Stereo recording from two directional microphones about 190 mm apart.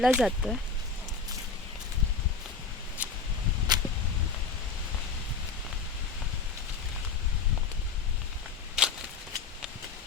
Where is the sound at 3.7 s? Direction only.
20° right (ahead or behind).